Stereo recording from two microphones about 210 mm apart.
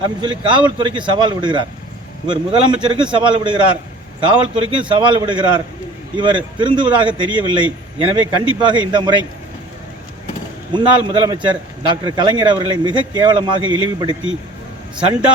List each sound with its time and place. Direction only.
0.0 s speech: 20° right (ahead or behind)
4.8 s speech: 25° right (ahead or behind)
10.7 s speech: 20° right (ahead or behind)